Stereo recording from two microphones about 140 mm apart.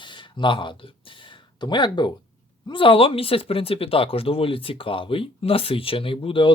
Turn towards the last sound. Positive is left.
turn(degrees=40)  # may be behind; listen again after turning